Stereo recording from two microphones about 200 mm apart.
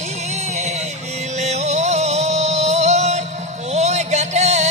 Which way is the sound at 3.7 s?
35° right (ahead or behind).